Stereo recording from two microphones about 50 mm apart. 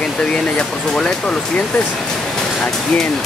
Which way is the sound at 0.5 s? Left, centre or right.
Centre.